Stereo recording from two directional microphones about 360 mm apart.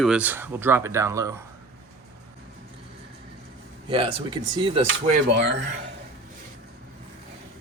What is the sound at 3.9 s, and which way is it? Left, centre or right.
Speech, centre.